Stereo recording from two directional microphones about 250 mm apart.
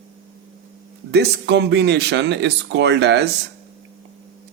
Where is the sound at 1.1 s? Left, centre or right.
Right.